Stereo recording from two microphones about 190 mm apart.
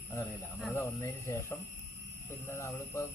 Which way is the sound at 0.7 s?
15° left (ahead or behind).